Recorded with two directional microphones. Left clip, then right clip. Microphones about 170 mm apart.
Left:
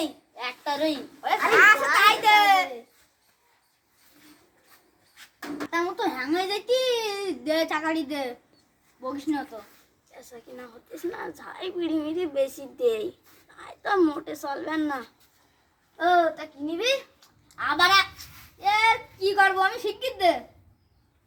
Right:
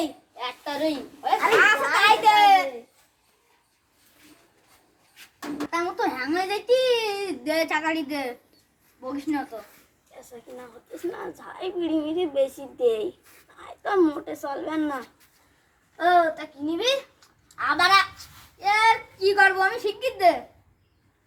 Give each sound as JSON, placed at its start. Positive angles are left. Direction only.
{"t": 0.3, "sound": "a sound", "side_deg": 5}
{"t": 1.2, "sound": "a child's voice", "side_deg": -10}
{"t": 5.7, "sound": "a child's voice", "side_deg": -10}
{"t": 11.1, "sound": "a woman's voice", "side_deg": 5}
{"t": 17.6, "sound": "a child's voice", "side_deg": -15}